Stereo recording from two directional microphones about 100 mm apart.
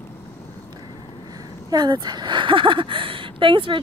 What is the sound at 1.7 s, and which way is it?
A woman's voice, 45° right (ahead or behind).